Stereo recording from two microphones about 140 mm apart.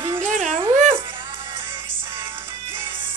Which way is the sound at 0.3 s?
60° right (ahead or behind).